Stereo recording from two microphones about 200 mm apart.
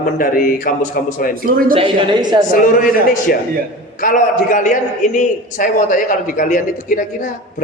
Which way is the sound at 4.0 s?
45° left (ahead or behind).